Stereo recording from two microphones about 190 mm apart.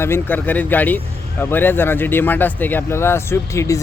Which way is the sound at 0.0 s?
10° left (ahead or behind).